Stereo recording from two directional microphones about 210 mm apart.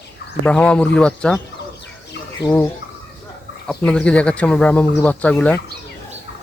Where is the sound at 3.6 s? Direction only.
5° left (ahead or behind).